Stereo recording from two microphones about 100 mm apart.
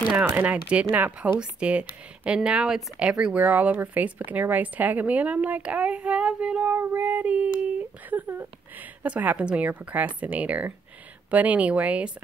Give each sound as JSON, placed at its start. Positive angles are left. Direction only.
{"t": 0.2, "sound": "speech", "side_deg": -15}